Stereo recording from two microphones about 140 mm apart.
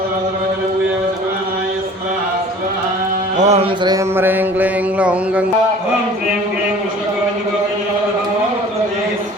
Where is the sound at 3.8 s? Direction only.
25° right (ahead or behind).